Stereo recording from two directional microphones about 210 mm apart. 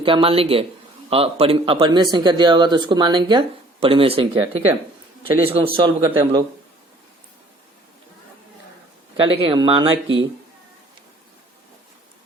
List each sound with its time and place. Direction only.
0.0 s a man's voice: 25° right (ahead or behind)
4.5 s a man's voice: 10° right (ahead or behind)
9.1 s a man's voice: 25° right (ahead or behind)
9.9 s speech: 65° right (ahead or behind)